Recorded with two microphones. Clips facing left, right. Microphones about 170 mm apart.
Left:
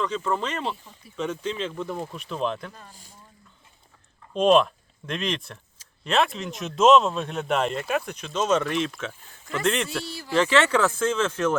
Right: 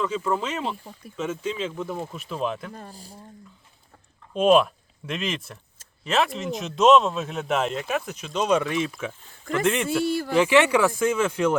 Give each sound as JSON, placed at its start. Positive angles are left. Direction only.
{"t": 0.0, "sound": "speech", "side_deg": -10}
{"t": 2.7, "sound": "speech", "side_deg": -40}
{"t": 4.4, "sound": "speech", "side_deg": -5}
{"t": 10.1, "sound": "speech", "side_deg": -50}
{"t": 10.3, "sound": "speech", "side_deg": -15}